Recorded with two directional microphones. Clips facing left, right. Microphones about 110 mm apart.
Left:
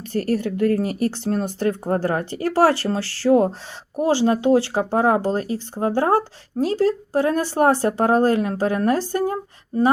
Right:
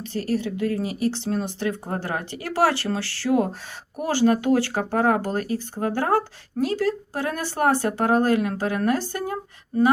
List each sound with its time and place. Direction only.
0.0 s speech: 50° left (ahead or behind)